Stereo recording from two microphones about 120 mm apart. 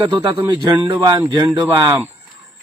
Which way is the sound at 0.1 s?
35° right (ahead or behind).